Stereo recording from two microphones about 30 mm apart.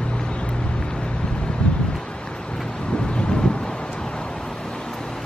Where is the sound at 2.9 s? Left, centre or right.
Left.